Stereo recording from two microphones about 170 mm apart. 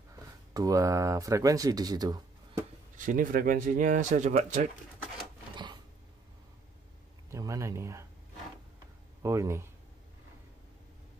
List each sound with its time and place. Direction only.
0.5 s speech: 20° right (ahead or behind)
3.0 s speech: 50° right (ahead or behind)
7.2 s speech: 20° right (ahead or behind)
9.2 s speech: 15° right (ahead or behind)